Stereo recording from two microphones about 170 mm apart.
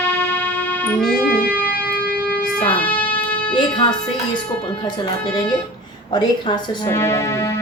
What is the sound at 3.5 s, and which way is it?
Music, 25° left (ahead or behind).